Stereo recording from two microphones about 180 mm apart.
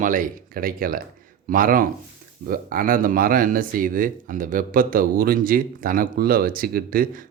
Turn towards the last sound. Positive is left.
turn(degrees=-55)  # may be behind; listen again after turning